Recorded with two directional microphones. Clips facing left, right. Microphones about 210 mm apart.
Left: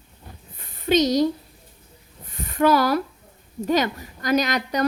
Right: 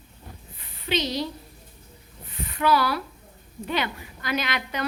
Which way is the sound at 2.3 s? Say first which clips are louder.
Left 4 dB; 45° left (ahead or behind).